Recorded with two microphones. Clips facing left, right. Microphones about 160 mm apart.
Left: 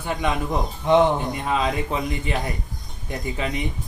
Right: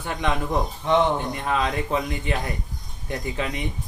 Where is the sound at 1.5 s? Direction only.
5° left (ahead or behind).